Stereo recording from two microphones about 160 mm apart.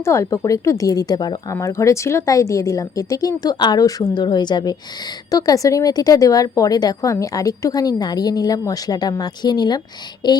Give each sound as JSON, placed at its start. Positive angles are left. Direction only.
{"t": 0.0, "sound": "a woman's voice", "side_deg": 20}